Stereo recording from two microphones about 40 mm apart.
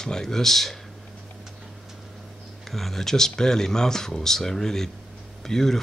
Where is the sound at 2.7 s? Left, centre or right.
Centre.